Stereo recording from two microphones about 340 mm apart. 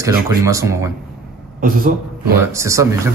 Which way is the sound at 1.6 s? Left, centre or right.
Right.